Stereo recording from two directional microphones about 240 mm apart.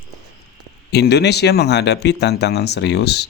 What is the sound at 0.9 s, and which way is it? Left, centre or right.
Speech, left.